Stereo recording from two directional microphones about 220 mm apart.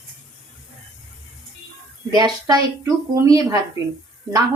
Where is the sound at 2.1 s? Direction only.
20° right (ahead or behind).